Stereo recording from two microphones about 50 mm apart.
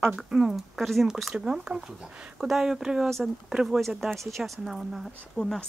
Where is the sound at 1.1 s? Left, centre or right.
Centre.